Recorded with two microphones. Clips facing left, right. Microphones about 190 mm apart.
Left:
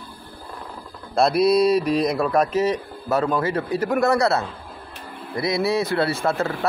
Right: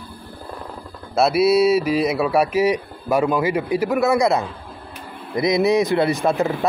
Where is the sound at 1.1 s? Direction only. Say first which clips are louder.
Right 1 dB; 5° right (ahead or behind).